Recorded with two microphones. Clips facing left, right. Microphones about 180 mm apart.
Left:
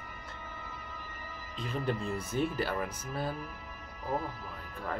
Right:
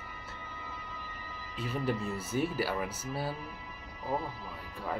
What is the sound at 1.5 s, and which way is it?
Speech, 5° right (ahead or behind).